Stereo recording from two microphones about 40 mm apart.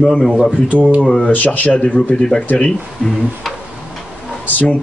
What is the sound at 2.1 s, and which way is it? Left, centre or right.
Speech, centre.